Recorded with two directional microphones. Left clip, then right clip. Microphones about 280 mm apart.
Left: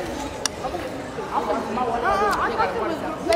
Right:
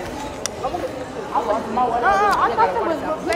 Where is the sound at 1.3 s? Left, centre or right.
Right.